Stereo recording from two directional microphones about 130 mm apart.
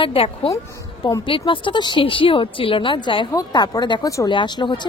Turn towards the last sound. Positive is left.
turn(degrees=35)  # may be behind; listen again after turning